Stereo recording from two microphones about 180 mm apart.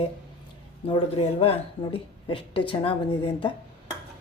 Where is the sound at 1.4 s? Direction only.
30° left (ahead or behind).